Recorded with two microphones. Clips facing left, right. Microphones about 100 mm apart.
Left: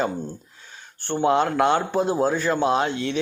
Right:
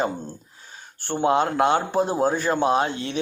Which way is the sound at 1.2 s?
35° right (ahead or behind).